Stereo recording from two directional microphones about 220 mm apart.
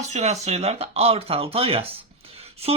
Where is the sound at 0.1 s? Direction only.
30° right (ahead or behind).